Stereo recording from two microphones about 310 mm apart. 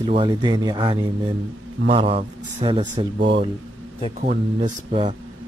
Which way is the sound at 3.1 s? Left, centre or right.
Right.